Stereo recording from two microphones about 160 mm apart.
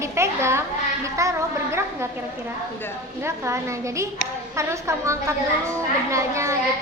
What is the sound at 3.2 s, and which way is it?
A woman's voice, 15° right (ahead or behind).